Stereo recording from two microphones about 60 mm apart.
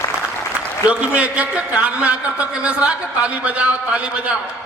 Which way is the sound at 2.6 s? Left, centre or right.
Centre.